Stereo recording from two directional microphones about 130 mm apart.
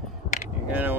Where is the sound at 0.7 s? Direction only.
15° right (ahead or behind).